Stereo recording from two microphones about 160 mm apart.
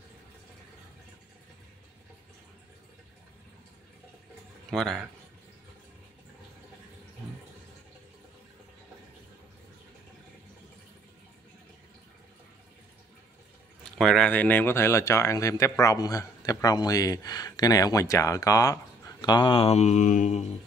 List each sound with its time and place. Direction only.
4.6 s speech: centre (ahead or behind)
13.8 s speech: 5° left (ahead or behind); by 20.5 s 45° left (ahead or behind)